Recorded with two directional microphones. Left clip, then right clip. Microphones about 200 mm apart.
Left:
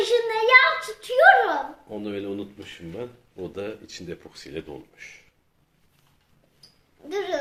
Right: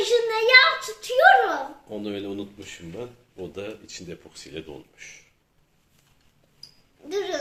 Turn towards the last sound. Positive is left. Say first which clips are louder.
# even
turn(degrees=0)  # may be behind; listen again after turning